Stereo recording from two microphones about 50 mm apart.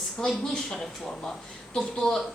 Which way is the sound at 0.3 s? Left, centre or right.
Centre.